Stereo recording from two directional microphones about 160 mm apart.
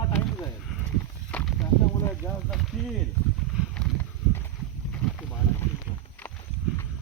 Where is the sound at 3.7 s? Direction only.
10° left (ahead or behind).